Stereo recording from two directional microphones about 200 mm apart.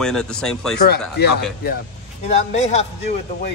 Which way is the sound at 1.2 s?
55° left (ahead or behind).